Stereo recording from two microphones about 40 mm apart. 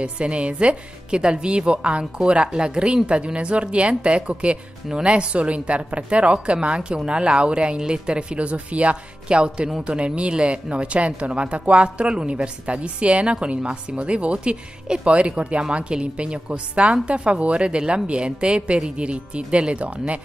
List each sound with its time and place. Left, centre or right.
0.0 s speech: right